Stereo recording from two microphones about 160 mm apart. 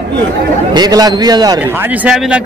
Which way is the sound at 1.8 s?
10° right (ahead or behind).